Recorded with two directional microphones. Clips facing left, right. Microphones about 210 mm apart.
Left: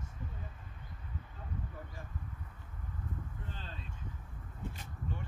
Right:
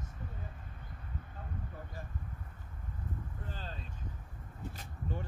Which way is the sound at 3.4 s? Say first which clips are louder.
Right 3 dB; 40° right (ahead or behind).